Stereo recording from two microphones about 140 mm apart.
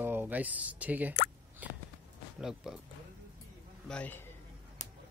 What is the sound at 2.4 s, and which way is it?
Speech, 5° right (ahead or behind).